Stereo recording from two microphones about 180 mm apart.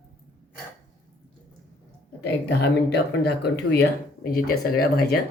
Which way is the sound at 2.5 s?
65° left (ahead or behind).